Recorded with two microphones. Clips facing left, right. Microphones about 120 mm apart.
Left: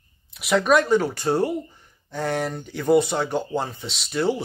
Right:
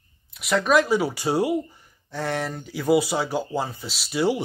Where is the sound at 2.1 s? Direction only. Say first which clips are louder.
Left 2 dB; centre (ahead or behind).